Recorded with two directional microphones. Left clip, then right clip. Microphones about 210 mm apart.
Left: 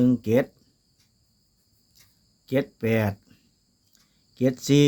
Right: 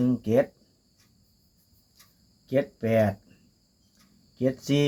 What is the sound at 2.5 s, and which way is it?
Speech, 40° left (ahead or behind).